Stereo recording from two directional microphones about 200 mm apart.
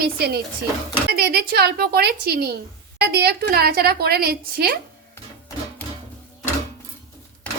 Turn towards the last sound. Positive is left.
turn(degrees=10)  # may be behind; listen again after turning